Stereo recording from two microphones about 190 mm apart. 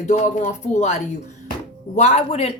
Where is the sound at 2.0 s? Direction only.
35° left (ahead or behind).